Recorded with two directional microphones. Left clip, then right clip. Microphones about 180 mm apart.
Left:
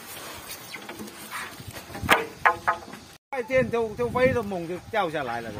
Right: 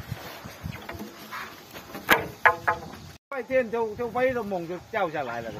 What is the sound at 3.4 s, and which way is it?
Speech, 75° left (ahead or behind).